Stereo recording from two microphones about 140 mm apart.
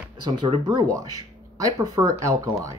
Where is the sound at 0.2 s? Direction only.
35° right (ahead or behind).